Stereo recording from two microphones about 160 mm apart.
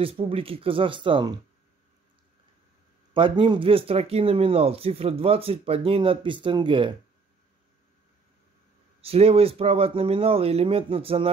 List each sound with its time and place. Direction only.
0.0 s speech: 35° right (ahead or behind)
3.1 s speech: 30° right (ahead or behind)
9.0 s speech: 40° right (ahead or behind)